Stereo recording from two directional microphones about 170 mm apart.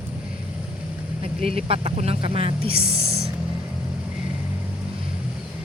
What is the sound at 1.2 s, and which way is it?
Speech, 35° right (ahead or behind).